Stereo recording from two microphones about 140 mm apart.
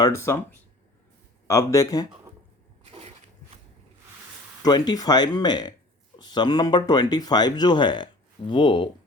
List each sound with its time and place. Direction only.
0.0 s speech: 20° left (ahead or behind)
1.5 s speech: 20° left (ahead or behind)
2.8 s a sound: 50° right (ahead or behind)
4.6 s speech: 30° left (ahead or behind)